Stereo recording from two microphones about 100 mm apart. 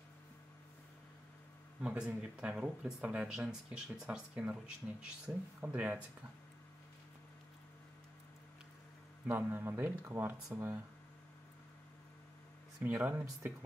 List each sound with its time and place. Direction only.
1.8 s speech: 10° right (ahead or behind)
9.3 s speech: 20° right (ahead or behind)
12.9 s speech: 15° right (ahead or behind)